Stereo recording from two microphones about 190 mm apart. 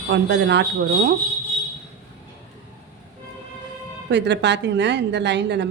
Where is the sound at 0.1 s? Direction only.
65° right (ahead or behind).